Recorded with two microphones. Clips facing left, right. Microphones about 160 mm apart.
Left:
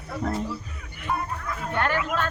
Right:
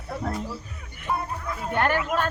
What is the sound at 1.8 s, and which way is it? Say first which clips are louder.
Speech: right 2 dB; 45° right (ahead or behind).